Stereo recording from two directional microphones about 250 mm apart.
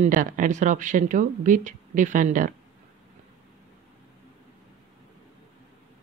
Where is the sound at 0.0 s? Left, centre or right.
Right.